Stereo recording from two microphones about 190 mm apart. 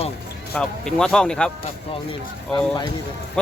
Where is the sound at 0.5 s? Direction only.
5° left (ahead or behind).